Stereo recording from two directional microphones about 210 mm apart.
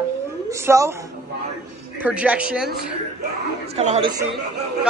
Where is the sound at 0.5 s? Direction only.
15° right (ahead or behind).